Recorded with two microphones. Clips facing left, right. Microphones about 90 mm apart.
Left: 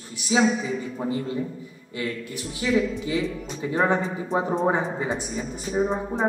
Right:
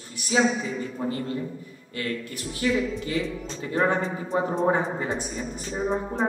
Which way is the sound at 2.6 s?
15° left (ahead or behind).